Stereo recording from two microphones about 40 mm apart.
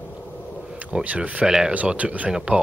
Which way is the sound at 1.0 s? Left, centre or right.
Right.